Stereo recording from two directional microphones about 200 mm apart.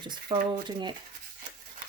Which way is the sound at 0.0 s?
20° right (ahead or behind).